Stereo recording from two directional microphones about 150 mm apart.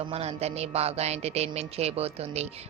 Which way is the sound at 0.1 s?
45° right (ahead or behind).